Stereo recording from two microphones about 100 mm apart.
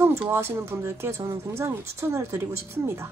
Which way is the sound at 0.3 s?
25° right (ahead or behind).